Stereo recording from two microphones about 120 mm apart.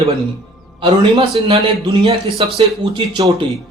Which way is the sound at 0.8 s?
50° right (ahead or behind).